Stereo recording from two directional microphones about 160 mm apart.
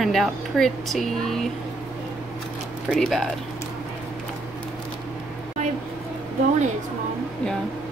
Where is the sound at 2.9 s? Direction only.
Centre (ahead or behind).